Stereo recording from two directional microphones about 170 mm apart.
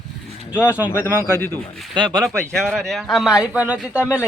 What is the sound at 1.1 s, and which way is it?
Speech, 15° right (ahead or behind).